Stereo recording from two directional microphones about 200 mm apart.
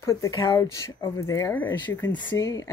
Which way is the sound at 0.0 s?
15° left (ahead or behind).